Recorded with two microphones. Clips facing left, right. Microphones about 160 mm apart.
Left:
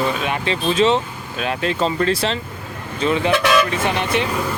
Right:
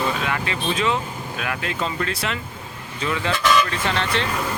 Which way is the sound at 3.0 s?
20° left (ahead or behind).